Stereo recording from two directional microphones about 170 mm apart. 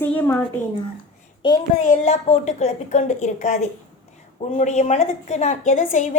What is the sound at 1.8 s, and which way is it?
A woman's voice, 45° left (ahead or behind).